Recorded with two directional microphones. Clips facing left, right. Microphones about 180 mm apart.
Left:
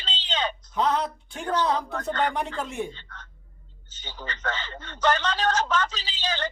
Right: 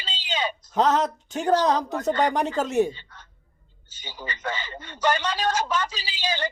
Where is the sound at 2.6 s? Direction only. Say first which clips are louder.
Right 9 dB; 90° right.